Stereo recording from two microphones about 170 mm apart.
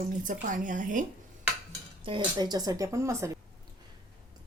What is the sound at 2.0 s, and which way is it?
Speech, 25° right (ahead or behind).